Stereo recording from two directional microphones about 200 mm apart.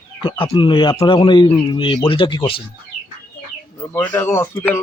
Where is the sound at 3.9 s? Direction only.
10° left (ahead or behind).